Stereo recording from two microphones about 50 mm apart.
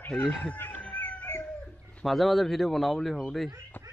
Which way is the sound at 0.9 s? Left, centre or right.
Left.